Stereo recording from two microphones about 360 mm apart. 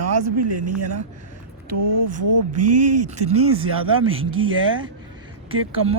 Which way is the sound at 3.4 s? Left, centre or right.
Centre.